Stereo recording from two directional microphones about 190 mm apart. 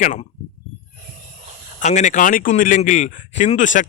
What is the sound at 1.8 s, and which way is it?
A man's voice, 40° left (ahead or behind).